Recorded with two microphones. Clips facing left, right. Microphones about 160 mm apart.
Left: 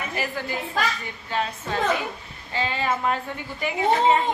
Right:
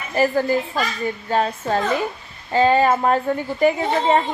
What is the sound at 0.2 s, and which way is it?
A woman's voice, 40° right (ahead or behind).